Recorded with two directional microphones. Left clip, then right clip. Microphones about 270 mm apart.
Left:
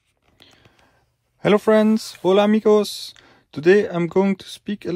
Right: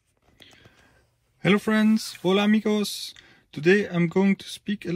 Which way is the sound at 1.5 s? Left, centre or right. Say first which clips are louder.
Left 7 dB; centre.